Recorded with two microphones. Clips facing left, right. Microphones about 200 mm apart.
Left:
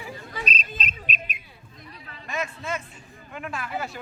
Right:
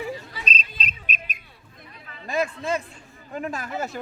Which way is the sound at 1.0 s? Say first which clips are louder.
Left 1 dB; 45° right (ahead or behind).